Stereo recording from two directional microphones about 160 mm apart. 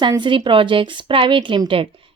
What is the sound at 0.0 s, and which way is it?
A woman's voice, 30° right (ahead or behind).